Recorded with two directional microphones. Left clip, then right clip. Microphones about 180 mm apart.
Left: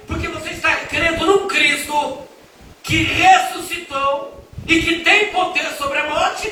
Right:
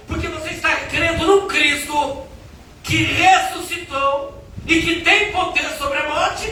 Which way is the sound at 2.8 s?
25° left (ahead or behind).